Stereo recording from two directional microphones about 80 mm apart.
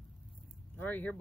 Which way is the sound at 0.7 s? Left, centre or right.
Left.